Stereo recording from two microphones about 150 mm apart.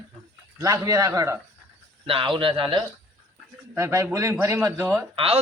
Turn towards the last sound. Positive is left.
turn(degrees=-40)  # may be behind; listen again after turning